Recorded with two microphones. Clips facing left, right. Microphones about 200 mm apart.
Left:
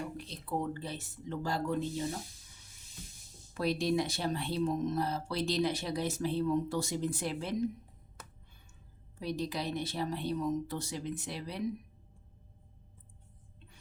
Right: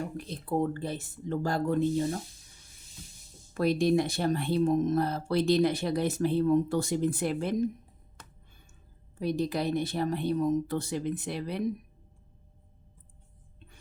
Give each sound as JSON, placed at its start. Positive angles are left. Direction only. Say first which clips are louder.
{"t": 0.0, "sound": "speech", "louder": "right 5 dB", "side_deg": -50}
{"t": 3.5, "sound": "speech", "louder": "right 6 dB", "side_deg": -50}
{"t": 9.1, "sound": "speech", "louder": "right 6 dB", "side_deg": -50}